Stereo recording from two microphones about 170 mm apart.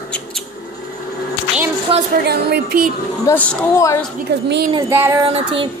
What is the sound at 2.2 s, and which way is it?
Speech, 65° right (ahead or behind).